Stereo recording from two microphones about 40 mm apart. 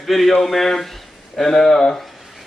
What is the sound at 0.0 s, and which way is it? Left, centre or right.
Speech, centre.